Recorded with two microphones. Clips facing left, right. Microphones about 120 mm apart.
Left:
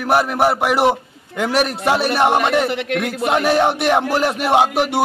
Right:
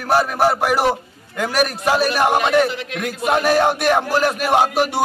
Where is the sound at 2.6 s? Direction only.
65° left (ahead or behind).